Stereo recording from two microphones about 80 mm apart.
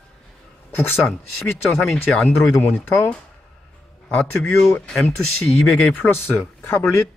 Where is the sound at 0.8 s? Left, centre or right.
Left.